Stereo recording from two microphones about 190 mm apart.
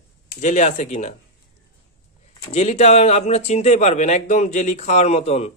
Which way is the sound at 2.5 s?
35° left (ahead or behind).